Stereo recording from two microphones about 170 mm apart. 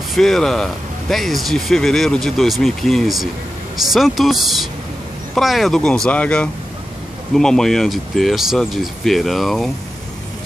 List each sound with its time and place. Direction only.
0.1 s speech: centre (ahead or behind)